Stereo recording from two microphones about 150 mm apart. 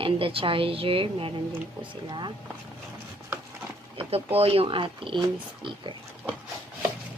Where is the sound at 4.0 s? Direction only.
40° right (ahead or behind).